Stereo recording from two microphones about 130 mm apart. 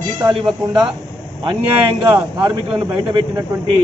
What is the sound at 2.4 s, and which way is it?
Speech, 35° right (ahead or behind).